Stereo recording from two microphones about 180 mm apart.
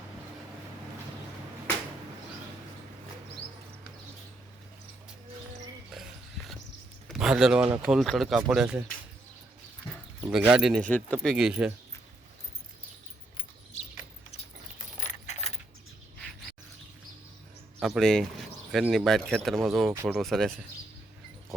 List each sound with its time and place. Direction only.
7.1 s speech: 5° right (ahead or behind)
10.2 s speech: 10° right (ahead or behind)
15.0 s keys jangling: 40° left (ahead or behind)
17.7 s speech: centre (ahead or behind)
19.9 s speech: 15° right (ahead or behind)
20.1 s speech: centre (ahead or behind)